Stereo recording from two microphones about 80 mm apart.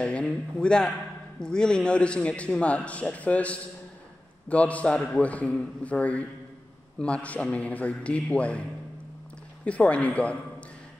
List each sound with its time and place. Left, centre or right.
0.0 s a man's voice: centre
9.7 s a man's voice: centre